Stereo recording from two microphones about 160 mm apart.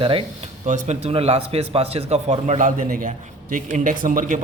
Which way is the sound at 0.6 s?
45° right (ahead or behind).